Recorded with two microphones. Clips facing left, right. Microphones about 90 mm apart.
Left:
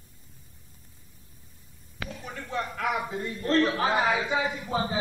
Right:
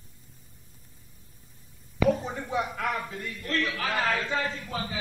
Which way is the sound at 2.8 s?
10° left (ahead or behind).